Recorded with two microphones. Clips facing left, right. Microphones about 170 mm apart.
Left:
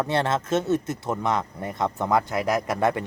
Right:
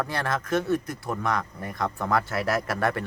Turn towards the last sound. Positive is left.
turn(degrees=20)  # may be behind; listen again after turning